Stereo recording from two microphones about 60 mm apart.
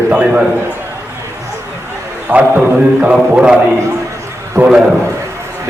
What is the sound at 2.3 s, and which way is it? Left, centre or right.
A man's voice, right.